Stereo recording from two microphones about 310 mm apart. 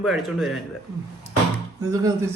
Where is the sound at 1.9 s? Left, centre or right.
Centre.